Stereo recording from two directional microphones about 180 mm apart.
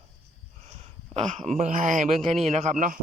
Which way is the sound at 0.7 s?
40° right (ahead or behind).